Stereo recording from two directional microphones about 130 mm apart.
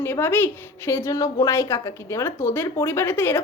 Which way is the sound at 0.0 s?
15° left (ahead or behind).